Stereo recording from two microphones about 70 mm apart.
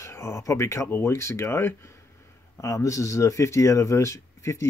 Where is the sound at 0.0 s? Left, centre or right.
Left.